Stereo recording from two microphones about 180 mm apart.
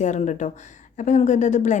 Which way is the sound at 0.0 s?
40° left (ahead or behind).